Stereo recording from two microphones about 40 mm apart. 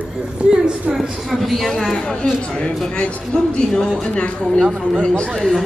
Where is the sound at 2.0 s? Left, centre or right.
Centre.